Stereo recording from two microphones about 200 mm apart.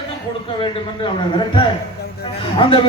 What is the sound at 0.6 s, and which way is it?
A man's voice, 25° left (ahead or behind).